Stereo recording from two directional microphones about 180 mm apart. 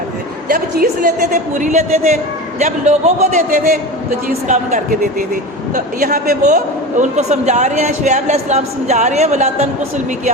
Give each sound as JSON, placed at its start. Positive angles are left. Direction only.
{"t": 0.5, "sound": "a woman's voice", "side_deg": -50}